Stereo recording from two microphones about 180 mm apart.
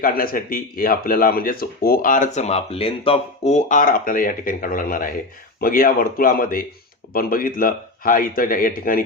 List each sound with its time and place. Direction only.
0.0 s speech: 55° left (ahead or behind)